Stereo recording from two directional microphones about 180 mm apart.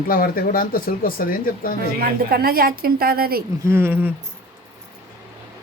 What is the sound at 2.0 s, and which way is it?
A woman's voice, 55° right (ahead or behind).